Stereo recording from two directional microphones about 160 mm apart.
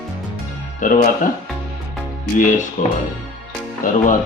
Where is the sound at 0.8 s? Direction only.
55° left (ahead or behind).